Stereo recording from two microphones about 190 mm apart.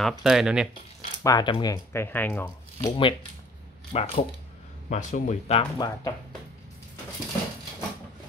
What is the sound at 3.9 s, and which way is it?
Speech, 30° left (ahead or behind).